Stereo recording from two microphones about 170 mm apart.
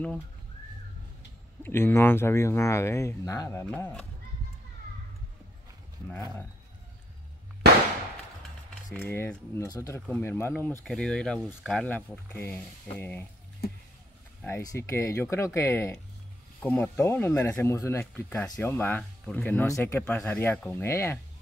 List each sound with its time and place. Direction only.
1.6 s speech: 15° left (ahead or behind)
8.9 s speech: 15° left (ahead or behind)
13.6 s speech: 65° left (ahead or behind)
14.4 s speech: 15° left (ahead or behind)